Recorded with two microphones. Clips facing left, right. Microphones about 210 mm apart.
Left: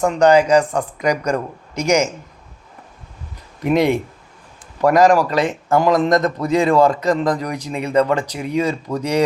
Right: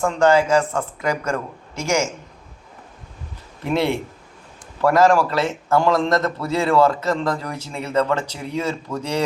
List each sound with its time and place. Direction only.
0.0 s a man's voice: 15° left (ahead or behind)
3.6 s a man's voice: 15° left (ahead or behind)